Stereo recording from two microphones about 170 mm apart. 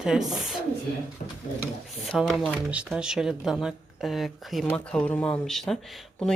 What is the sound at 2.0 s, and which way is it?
Speech, centre (ahead or behind).